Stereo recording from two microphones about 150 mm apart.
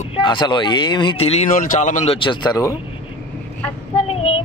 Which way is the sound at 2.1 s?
30° left (ahead or behind).